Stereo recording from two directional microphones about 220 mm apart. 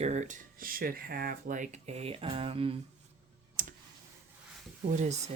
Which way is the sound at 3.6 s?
40° right (ahead or behind).